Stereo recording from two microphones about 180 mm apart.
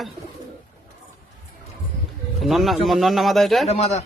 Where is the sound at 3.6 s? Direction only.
35° left (ahead or behind).